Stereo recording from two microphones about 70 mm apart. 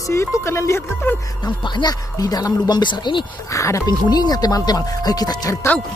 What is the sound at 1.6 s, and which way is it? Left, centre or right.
Speech, left.